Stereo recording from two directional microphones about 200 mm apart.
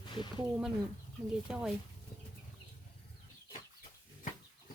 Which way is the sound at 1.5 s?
5° right (ahead or behind).